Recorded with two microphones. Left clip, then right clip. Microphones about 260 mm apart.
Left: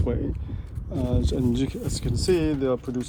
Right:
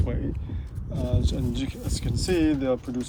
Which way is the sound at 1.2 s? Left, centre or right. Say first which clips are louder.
Left 5 dB; left.